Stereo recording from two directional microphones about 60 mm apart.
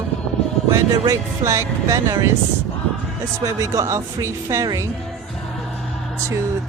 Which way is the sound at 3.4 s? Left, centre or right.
Right.